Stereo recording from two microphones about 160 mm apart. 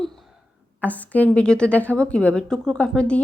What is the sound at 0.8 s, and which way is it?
Speech, 10° left (ahead or behind).